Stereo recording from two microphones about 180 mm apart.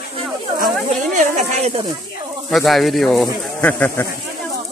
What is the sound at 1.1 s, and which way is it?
Speech, 45° right (ahead or behind).